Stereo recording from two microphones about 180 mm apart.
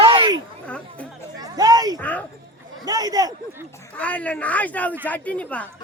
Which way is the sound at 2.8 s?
20° right (ahead or behind).